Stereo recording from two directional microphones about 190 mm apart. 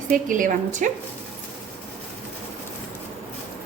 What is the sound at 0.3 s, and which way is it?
Speech, 45° right (ahead or behind).